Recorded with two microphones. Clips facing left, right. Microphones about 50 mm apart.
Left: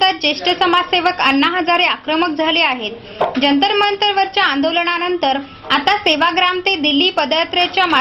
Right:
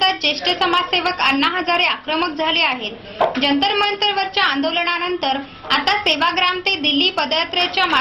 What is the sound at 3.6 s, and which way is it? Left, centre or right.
Speech, left.